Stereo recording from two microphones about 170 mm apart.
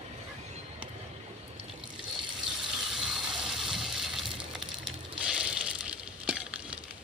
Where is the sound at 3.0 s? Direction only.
Centre (ahead or behind).